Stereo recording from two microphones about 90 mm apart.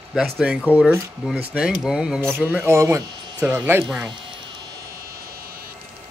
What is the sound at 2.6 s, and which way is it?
Speech, 30° right (ahead or behind).